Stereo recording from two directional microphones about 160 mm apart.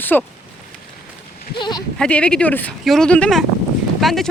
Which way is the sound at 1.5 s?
30° left (ahead or behind).